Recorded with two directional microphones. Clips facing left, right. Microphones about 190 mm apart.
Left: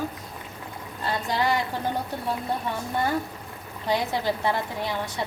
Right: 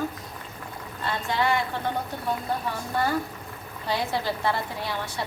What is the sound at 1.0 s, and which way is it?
Speech, 40° left (ahead or behind).